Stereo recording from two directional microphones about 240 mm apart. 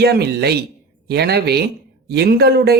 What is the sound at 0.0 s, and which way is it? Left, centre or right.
A man's voice, right.